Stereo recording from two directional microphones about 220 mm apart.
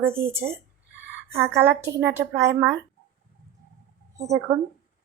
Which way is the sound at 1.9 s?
15° right (ahead or behind).